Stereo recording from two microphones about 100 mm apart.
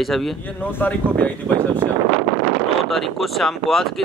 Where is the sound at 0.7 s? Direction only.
15° left (ahead or behind).